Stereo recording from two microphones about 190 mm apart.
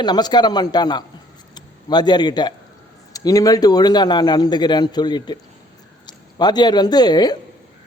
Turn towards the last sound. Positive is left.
turn(degrees=20)  # may be behind; listen again after turning